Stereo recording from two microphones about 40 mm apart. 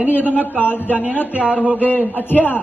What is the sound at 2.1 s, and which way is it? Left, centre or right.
Speech, left.